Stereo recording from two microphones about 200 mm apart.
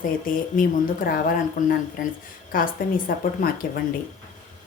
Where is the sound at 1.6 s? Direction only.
40° left (ahead or behind).